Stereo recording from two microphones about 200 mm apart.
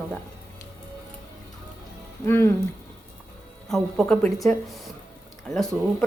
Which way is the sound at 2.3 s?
10° left (ahead or behind).